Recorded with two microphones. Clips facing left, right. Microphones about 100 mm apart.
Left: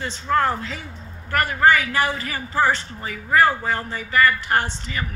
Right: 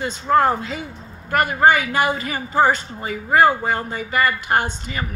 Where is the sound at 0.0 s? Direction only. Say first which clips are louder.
Right 4 dB; 20° right (ahead or behind).